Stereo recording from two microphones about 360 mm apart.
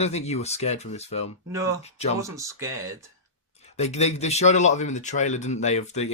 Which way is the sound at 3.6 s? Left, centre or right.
Centre.